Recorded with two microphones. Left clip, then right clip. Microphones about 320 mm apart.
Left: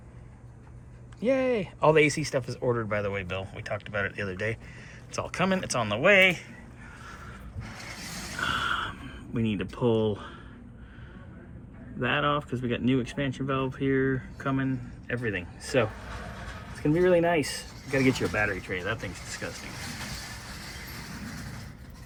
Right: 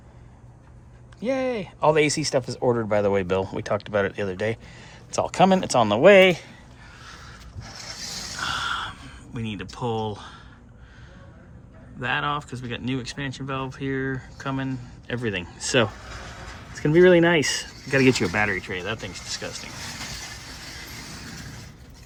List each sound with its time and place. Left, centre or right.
1.2 s speech: centre
8.4 s a sound: centre
11.9 s speech: centre
15.0 s speech: right
18.0 s speech: right